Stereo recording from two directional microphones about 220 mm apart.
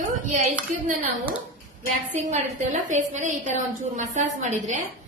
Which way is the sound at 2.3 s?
35° right (ahead or behind).